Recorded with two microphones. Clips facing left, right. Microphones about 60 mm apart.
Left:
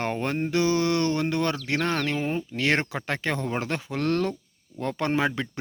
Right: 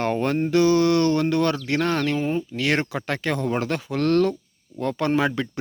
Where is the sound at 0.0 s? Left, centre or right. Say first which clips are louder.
Right 5 dB; centre.